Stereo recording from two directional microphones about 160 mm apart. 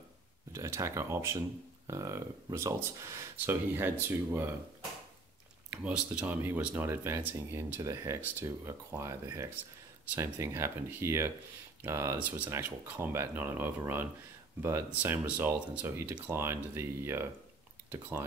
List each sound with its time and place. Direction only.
0.5 s speech: 20° right (ahead or behind)
5.7 s speech: 5° right (ahead or behind)